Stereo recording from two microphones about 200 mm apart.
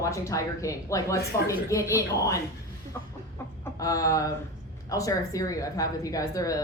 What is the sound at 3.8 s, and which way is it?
Speech, 15° left (ahead or behind).